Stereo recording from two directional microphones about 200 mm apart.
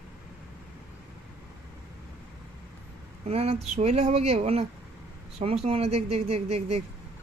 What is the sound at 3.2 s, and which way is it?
Speech, 30° right (ahead or behind).